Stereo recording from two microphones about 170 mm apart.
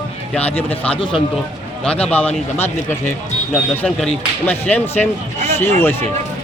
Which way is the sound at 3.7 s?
5° left (ahead or behind).